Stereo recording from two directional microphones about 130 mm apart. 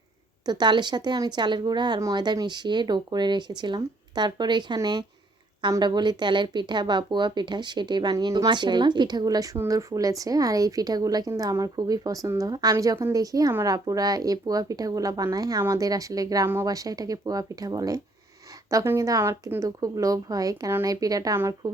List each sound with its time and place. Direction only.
0.4 s speech: 35° right (ahead or behind)